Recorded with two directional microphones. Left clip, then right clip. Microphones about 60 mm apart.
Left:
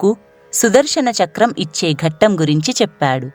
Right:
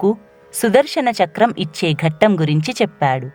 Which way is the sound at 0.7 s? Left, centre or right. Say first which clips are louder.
Left 1 dB; left.